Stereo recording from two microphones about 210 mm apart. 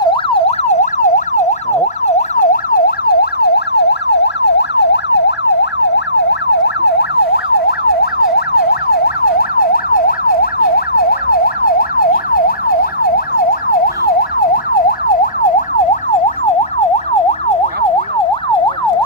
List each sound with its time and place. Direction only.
0.0 s emergency vehicle: 25° left (ahead or behind); by 16.0 s 40° left (ahead or behind)